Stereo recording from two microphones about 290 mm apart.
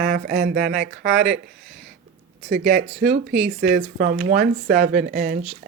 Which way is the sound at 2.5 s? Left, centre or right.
Right.